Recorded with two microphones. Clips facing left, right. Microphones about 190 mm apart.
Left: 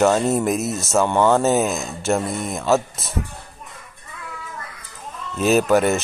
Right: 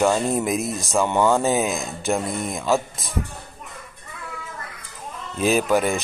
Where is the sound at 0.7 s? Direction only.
15° right (ahead or behind).